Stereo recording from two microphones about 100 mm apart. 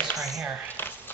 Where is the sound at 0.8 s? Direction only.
20° left (ahead or behind).